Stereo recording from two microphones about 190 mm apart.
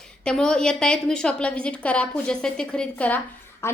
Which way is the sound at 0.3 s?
5° left (ahead or behind).